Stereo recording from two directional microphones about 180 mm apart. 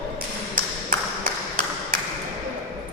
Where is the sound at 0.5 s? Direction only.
50° right (ahead or behind).